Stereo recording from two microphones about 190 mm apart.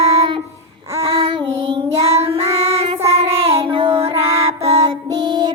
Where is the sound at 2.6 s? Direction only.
30° right (ahead or behind).